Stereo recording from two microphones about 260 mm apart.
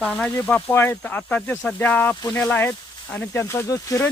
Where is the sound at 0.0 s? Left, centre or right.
Centre.